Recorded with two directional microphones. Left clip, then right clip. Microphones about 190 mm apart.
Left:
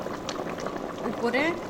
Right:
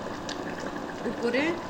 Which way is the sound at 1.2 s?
60° left (ahead or behind).